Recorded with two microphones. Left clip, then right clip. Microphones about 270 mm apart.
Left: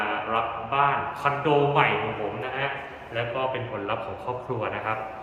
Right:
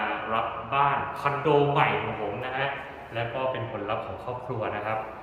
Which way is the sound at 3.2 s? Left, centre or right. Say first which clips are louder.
Left 2 dB; centre.